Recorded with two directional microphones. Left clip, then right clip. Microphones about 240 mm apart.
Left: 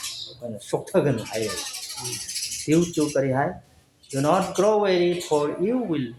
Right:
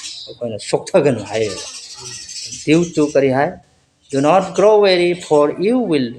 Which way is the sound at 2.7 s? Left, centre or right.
Right.